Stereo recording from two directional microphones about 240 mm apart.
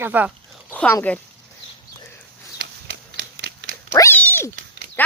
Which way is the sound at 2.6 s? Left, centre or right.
Right.